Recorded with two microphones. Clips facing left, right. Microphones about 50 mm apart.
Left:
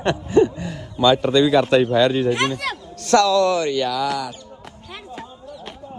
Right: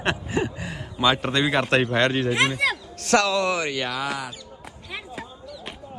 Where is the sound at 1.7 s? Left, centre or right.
Right.